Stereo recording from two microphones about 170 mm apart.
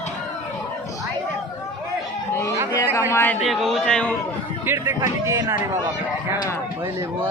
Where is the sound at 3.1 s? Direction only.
10° left (ahead or behind).